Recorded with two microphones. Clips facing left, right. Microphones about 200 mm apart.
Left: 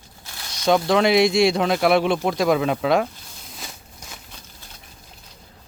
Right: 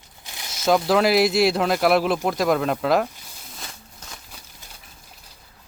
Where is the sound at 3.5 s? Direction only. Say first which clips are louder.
Left 1 dB; 5° left (ahead or behind).